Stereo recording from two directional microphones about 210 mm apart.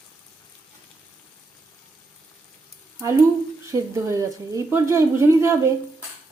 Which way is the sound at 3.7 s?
15° right (ahead or behind).